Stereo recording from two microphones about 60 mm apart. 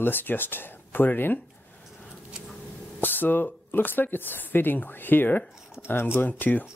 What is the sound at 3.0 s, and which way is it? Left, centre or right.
Speech, left.